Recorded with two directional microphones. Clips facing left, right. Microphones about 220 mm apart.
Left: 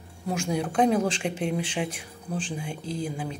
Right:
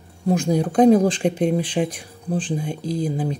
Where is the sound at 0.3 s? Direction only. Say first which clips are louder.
Right 8 dB; 35° right (ahead or behind).